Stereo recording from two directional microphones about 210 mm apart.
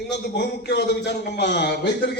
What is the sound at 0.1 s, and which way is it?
A man's voice, 55° left (ahead or behind).